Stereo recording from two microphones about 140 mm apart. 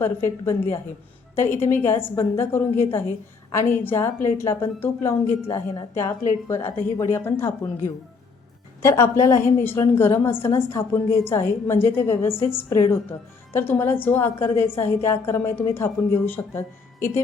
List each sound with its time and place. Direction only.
0.0 s a woman's voice: 15° left (ahead or behind)